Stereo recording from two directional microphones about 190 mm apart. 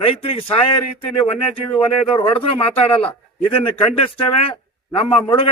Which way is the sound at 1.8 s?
25° left (ahead or behind).